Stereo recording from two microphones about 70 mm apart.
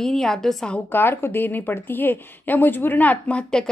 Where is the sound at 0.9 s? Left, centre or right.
Left.